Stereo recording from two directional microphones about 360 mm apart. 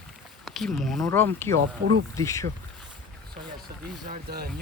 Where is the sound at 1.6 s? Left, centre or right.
Right.